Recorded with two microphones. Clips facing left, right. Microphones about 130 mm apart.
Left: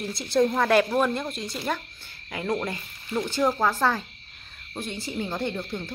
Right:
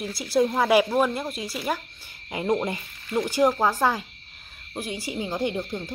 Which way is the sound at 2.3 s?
20° right (ahead or behind).